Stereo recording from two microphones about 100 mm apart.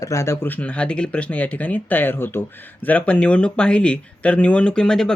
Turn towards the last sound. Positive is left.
turn(degrees=5)  # may be behind; listen again after turning